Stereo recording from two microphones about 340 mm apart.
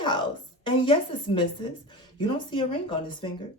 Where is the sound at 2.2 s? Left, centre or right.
Centre.